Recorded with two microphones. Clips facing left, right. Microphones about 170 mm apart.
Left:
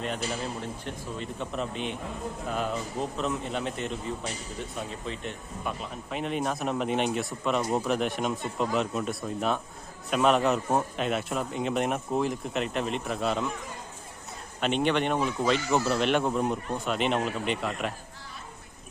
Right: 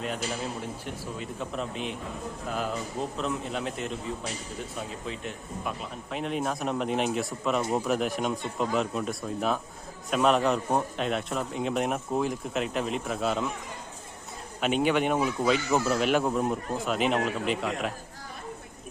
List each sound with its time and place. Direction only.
0.6 s a man's voice: 10° right (ahead or behind)
14.6 s a man's voice: 5° right (ahead or behind)